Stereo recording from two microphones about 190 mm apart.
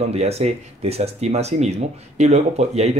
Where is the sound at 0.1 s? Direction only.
35° right (ahead or behind).